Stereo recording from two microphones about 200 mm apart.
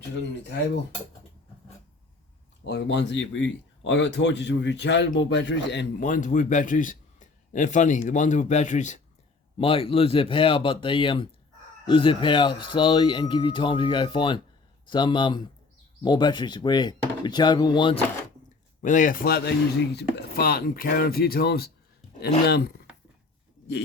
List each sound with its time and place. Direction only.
2.6 s speech: 60° left (ahead or behind)
6.0 s a man's voice: 40° left (ahead or behind); by 18.0 s 25° left (ahead or behind)
18.8 s speech: 40° left (ahead or behind)